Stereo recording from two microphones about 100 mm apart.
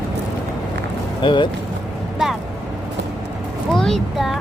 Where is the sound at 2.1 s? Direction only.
5° right (ahead or behind).